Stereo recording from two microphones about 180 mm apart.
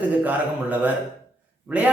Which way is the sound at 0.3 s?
10° right (ahead or behind).